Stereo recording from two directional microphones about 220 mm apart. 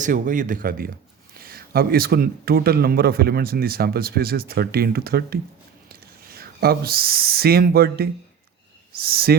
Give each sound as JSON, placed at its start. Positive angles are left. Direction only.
{"t": 0.0, "sound": "speech", "side_deg": -35}